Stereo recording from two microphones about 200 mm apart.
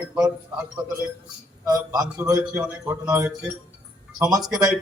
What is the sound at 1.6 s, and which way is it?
A man's voice, 20° right (ahead or behind).